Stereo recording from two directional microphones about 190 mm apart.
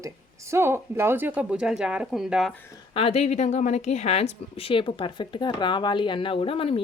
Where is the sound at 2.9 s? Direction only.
30° left (ahead or behind).